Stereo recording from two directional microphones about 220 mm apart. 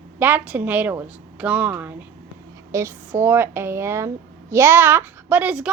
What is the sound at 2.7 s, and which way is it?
Speech, 10° right (ahead or behind).